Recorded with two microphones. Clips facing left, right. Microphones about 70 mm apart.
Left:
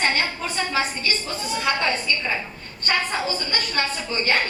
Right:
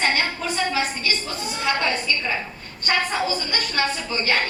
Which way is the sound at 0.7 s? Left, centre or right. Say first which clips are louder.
Even; left.